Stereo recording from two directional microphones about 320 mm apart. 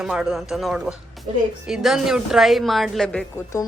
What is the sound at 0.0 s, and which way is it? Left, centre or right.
Speech, centre.